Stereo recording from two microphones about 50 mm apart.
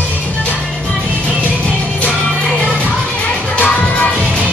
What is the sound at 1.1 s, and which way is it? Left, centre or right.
Music, left.